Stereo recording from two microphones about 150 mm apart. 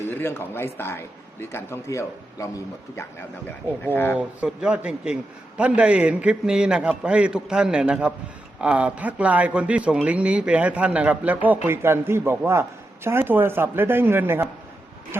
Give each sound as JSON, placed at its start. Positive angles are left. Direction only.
{"t": 0.1, "sound": "a man's voice", "side_deg": 15}
{"t": 4.2, "sound": "speech", "side_deg": -10}